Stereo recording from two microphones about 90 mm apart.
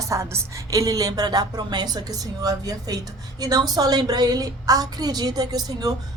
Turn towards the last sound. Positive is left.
turn(degrees=-45)  # may be behind; listen again after turning